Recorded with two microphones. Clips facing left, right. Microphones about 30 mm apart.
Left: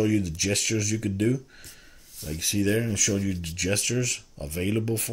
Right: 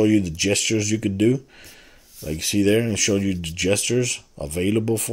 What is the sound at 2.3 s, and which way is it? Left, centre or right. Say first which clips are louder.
Speech: right 6 dB; right.